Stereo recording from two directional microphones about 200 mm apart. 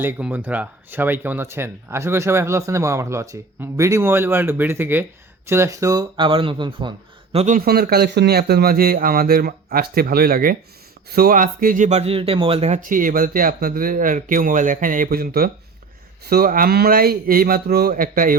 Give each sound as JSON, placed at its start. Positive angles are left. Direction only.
{"t": 0.0, "sound": "speech", "side_deg": -10}
{"t": 7.3, "sound": "speech", "side_deg": -40}